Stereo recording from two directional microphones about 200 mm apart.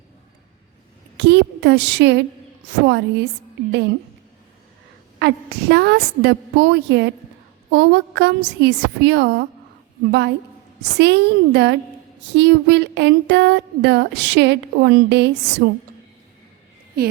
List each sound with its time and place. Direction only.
1.1 s a sound: 60° right (ahead or behind)
2.8 s speech: 60° right (ahead or behind)
5.2 s speech: 60° right (ahead or behind)